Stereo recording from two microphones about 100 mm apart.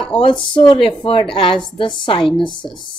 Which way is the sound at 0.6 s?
60° left (ahead or behind).